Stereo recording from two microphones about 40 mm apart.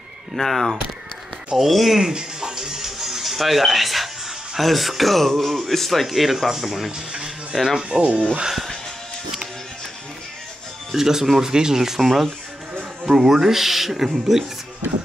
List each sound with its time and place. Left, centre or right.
0.4 s speech: centre
1.7 s music: centre
4.6 s speech: centre
7.5 s speech: centre
7.9 s speech: right
10.9 s speech: centre